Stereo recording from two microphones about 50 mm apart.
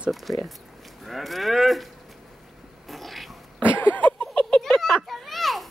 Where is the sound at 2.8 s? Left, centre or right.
Centre.